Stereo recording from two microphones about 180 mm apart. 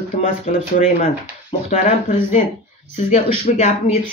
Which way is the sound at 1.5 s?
45° left (ahead or behind).